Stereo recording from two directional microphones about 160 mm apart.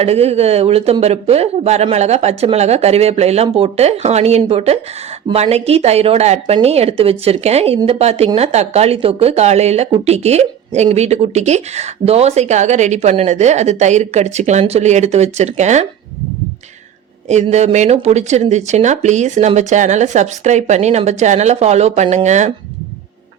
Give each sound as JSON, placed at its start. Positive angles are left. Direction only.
{"t": 0.0, "sound": "speech", "side_deg": -40}
{"t": 17.2, "sound": "speech", "side_deg": -45}